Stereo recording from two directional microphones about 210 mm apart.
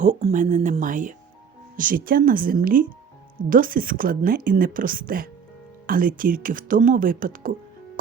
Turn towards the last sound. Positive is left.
turn(degrees=-40)  # may be behind; listen again after turning